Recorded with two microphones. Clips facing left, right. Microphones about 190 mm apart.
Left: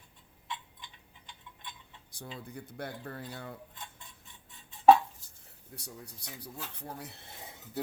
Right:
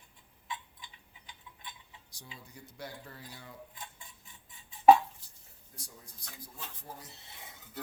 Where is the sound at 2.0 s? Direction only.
55° left (ahead or behind).